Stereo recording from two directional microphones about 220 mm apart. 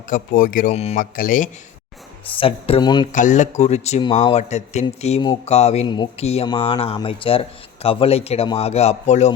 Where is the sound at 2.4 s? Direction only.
25° left (ahead or behind).